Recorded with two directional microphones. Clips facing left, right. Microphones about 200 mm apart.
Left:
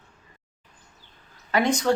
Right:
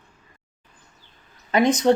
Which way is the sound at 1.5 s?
20° right (ahead or behind).